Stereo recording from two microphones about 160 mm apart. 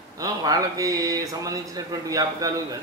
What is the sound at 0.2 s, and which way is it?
Speech, 20° right (ahead or behind).